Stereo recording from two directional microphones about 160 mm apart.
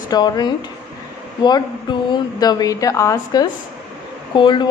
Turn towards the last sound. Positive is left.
turn(degrees=30)  # may be behind; listen again after turning